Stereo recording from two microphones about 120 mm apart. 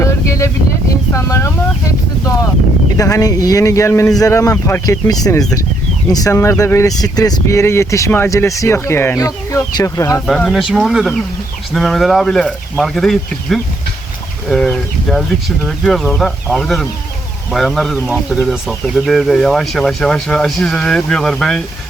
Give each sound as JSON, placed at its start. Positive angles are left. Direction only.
{"t": 0.0, "sound": "boat", "side_deg": 25}
{"t": 1.1, "sound": "a sound", "side_deg": 25}
{"t": 3.0, "sound": "speech", "side_deg": 30}
{"t": 10.2, "sound": "speech", "side_deg": 5}
{"t": 15.1, "sound": "speech", "side_deg": 0}